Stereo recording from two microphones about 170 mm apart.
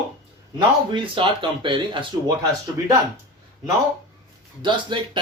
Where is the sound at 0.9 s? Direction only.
30° right (ahead or behind).